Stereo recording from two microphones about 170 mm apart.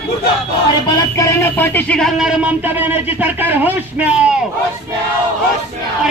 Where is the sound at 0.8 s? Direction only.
20° left (ahead or behind); by 4.3 s 10° right (ahead or behind).